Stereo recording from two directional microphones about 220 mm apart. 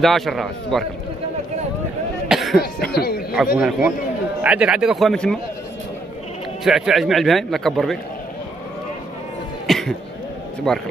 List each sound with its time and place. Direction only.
0.0 s a man's voice: centre (ahead or behind)
2.2 s cough: centre (ahead or behind)
2.9 s a sound: 45° left (ahead or behind)
3.5 s a man's voice: 5° right (ahead or behind)
6.6 s a man's voice: centre (ahead or behind)
9.7 s cough: centre (ahead or behind)
10.7 s a man's voice: 5° left (ahead or behind)